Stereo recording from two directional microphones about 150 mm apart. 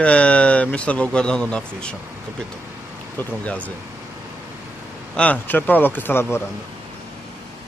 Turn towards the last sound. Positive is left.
turn(degrees=15)  # may be behind; listen again after turning